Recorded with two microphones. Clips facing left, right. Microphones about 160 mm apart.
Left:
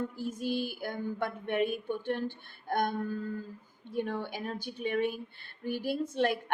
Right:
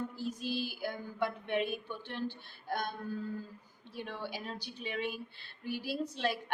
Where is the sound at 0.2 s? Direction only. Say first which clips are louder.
Left 3 dB; 50° left (ahead or behind).